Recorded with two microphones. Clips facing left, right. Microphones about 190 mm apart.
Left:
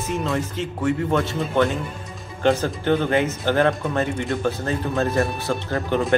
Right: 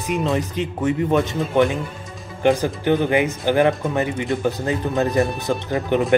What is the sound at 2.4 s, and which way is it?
Speech, 15° right (ahead or behind).